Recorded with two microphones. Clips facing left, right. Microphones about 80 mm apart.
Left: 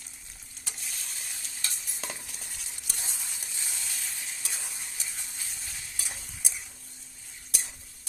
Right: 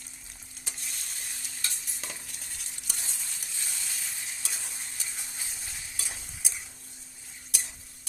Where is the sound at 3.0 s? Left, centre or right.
Centre.